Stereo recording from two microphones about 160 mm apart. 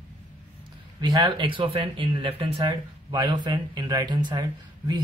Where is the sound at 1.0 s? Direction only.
25° right (ahead or behind).